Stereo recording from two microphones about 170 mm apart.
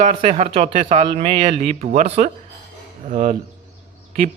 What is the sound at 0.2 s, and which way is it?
A man's voice, 35° right (ahead or behind).